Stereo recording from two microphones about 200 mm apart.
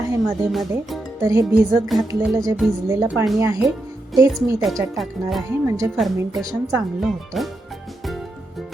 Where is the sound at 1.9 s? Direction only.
Centre (ahead or behind).